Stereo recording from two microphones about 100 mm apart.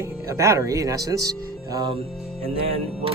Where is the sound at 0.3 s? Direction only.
30° right (ahead or behind).